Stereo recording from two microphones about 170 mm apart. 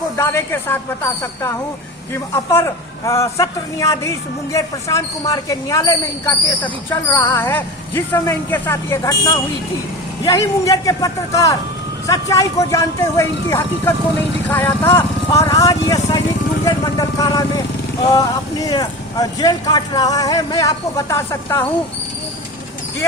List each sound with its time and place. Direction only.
0.2 s speech: 15° left (ahead or behind)